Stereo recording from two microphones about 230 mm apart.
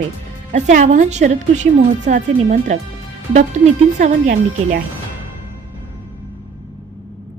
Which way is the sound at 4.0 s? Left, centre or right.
Right.